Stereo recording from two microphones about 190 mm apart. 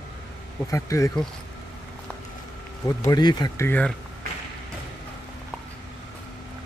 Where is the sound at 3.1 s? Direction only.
20° left (ahead or behind).